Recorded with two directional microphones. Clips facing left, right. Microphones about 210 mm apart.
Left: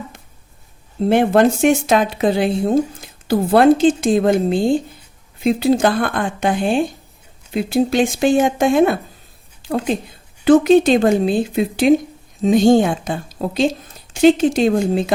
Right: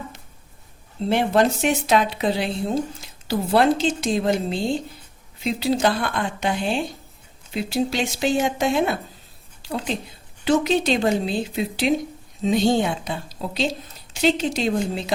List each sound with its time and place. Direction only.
1.0 s a woman's voice: 50° left (ahead or behind)